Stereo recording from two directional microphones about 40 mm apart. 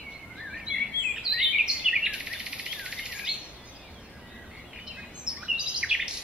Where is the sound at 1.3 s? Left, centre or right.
Centre.